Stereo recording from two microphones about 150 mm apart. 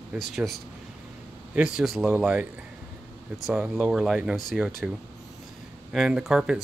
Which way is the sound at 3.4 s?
Centre (ahead or behind).